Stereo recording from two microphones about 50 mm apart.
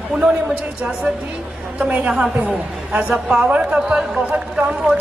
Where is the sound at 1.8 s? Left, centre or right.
Right.